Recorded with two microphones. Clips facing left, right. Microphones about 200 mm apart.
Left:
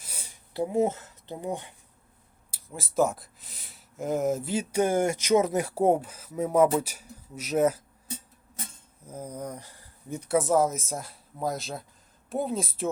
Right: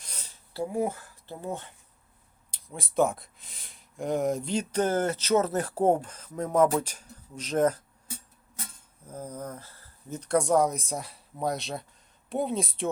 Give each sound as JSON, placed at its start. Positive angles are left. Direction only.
{"t": 0.0, "sound": "a sound", "side_deg": 10}
{"t": 2.5, "sound": "speech", "side_deg": 5}
{"t": 9.0, "sound": "speech", "side_deg": 10}